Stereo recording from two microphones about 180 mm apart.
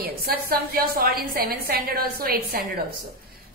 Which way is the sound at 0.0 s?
55° right (ahead or behind).